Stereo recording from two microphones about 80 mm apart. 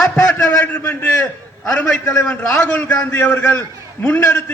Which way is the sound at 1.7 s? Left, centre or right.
Centre.